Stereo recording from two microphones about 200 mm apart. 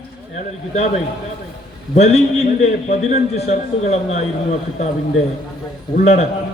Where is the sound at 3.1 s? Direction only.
35° left (ahead or behind).